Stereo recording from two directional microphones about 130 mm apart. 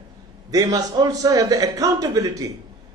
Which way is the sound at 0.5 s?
30° right (ahead or behind).